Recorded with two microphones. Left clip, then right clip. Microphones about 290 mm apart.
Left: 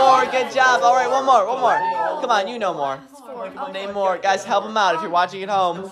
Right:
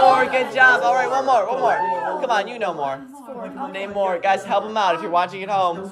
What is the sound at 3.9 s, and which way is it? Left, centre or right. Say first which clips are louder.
Speech: left 1 dB; left.